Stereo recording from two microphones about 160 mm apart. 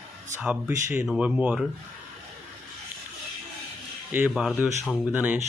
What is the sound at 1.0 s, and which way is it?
Speech, 5° right (ahead or behind).